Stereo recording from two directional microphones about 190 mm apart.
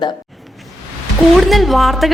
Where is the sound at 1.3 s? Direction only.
Centre (ahead or behind).